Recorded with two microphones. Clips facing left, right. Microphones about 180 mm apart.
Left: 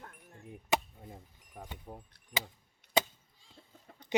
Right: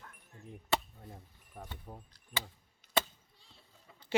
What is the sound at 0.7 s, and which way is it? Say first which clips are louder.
Chop: left 2 dB; 15° left (ahead or behind).